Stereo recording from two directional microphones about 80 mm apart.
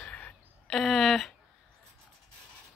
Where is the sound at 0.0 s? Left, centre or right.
Centre.